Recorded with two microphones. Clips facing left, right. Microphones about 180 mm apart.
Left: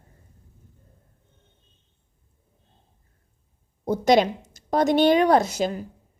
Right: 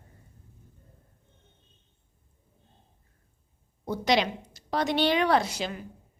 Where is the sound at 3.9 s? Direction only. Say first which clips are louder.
Left 7 dB; 45° left (ahead or behind).